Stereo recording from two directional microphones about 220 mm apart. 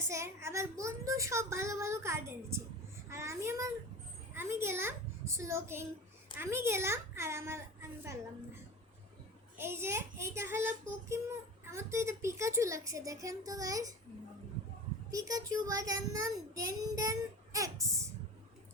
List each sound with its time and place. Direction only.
0.0 s child singing: 10° right (ahead or behind)
3.1 s babbling: 15° right (ahead or behind)
4.4 s a sound: 10° right (ahead or behind)
6.3 s child singing: 10° right (ahead or behind)
9.6 s child singing: 10° right (ahead or behind)
15.1 s child singing: 15° right (ahead or behind)